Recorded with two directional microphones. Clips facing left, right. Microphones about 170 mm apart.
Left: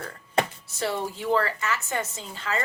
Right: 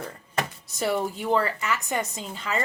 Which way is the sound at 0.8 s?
15° right (ahead or behind).